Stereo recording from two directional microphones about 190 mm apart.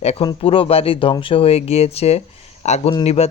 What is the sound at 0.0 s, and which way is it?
Speech, 35° left (ahead or behind).